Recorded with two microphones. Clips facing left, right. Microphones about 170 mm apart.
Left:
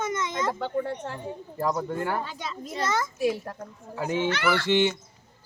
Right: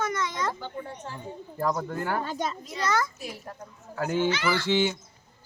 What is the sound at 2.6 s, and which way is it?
Speech, 50° left (ahead or behind).